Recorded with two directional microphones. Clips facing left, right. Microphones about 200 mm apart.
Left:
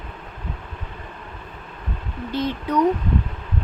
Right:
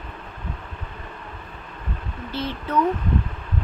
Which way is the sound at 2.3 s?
15° left (ahead or behind).